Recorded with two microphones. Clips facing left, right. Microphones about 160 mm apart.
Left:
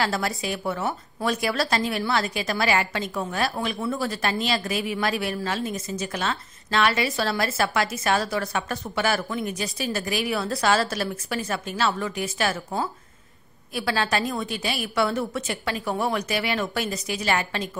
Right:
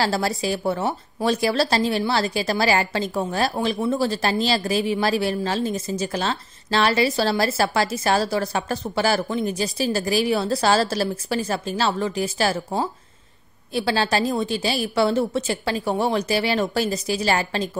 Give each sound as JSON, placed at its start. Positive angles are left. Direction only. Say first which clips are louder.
{"t": 0.0, "sound": "speech", "louder": "right 4 dB", "side_deg": -30}